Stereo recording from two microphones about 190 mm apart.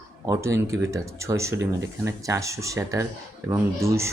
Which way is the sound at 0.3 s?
15° right (ahead or behind).